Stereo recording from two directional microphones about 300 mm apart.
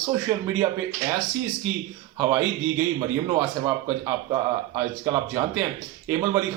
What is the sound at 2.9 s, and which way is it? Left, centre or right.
Speech, centre.